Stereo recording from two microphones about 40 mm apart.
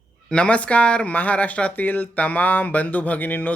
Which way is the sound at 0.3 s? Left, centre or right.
Left.